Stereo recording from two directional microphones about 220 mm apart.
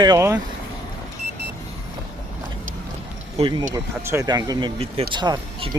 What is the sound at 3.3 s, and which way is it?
Speech, 20° right (ahead or behind).